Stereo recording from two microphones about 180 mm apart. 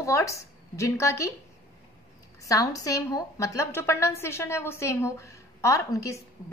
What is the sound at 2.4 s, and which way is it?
A woman's voice, 20° left (ahead or behind).